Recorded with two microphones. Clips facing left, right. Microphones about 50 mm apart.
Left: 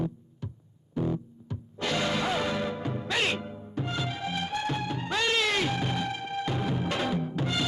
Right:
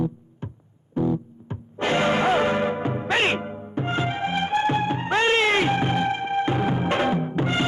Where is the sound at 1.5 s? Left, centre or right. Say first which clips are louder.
Right 7 dB; right.